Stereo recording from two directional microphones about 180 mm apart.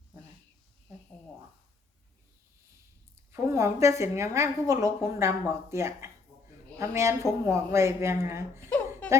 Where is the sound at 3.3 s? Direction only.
15° right (ahead or behind).